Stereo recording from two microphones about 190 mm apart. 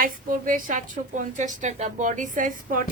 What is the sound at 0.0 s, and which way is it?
Speech, 45° right (ahead or behind).